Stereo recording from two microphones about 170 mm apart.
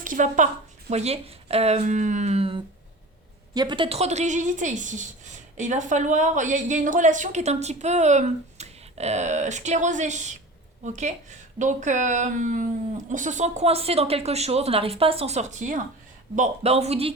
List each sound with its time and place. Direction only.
0.0 s a woman's voice: 50° right (ahead or behind)